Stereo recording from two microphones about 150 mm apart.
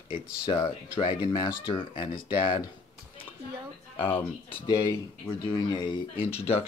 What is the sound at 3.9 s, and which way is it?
Speech, 40° left (ahead or behind).